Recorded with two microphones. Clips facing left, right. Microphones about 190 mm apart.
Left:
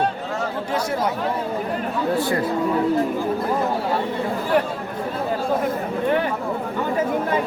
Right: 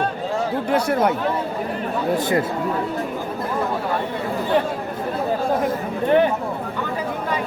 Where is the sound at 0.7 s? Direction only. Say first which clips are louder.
Right 5 dB; 60° right (ahead or behind).